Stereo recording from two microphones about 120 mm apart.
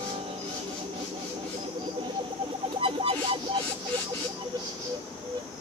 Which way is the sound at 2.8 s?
50° right (ahead or behind).